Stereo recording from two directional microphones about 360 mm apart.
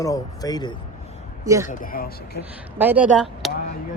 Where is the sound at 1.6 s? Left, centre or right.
Left.